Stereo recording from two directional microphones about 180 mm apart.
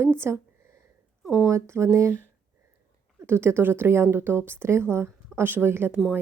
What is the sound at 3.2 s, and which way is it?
A woman's voice, 10° right (ahead or behind).